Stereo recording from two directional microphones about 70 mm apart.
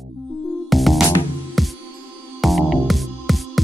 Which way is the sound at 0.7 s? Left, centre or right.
Centre.